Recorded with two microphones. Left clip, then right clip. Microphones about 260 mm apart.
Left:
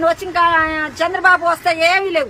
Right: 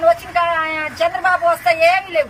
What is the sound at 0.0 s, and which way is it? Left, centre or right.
Speech, left.